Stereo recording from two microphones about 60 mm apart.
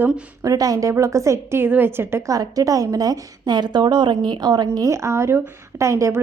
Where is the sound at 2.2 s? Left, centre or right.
Right.